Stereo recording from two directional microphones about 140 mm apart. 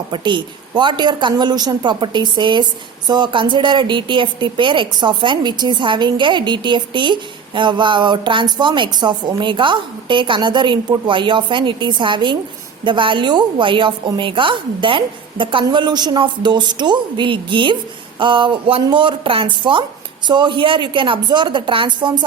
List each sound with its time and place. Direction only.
0.1 s a woman's voice: 35° right (ahead or behind)